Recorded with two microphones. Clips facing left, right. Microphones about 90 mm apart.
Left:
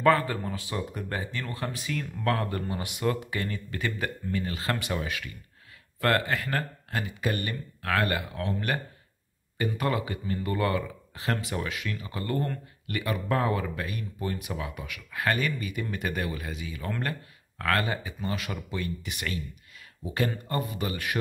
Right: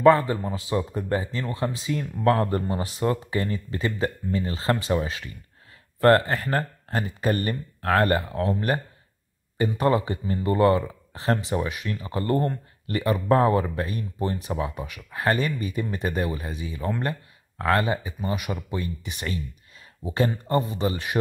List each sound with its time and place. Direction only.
0.0 s speech: 25° right (ahead or behind)